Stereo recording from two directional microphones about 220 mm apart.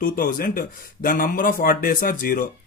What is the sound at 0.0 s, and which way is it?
Speech, 40° left (ahead or behind).